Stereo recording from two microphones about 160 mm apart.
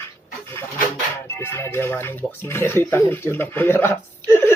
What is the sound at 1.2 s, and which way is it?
Speech, 15° left (ahead or behind).